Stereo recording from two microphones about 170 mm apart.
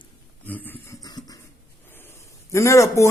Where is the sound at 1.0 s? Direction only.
25° left (ahead or behind).